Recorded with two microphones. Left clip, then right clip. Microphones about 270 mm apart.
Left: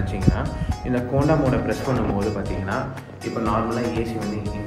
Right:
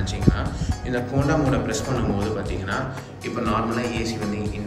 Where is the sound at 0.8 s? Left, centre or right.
Left.